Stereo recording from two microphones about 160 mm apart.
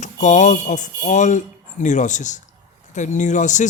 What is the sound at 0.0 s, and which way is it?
A man's voice, 50° left (ahead or behind).